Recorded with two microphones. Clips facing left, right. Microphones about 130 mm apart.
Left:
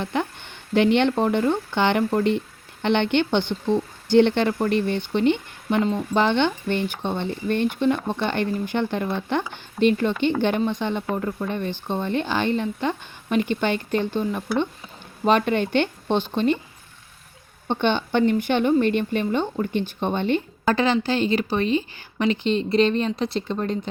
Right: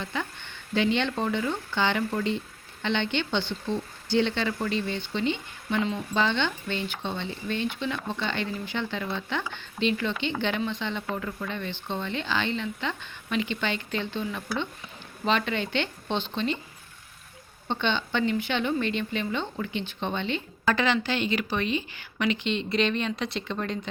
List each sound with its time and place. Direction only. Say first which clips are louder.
0.0 s speech: left 7 dB; 60° left (ahead or behind)
11.1 s speech: left 6 dB; 35° left (ahead or behind)
11.4 s speech: left 6 dB; 50° left (ahead or behind)
17.7 s speech: left 6 dB; 50° left (ahead or behind)
20.7 s speech: left 4 dB; 35° left (ahead or behind)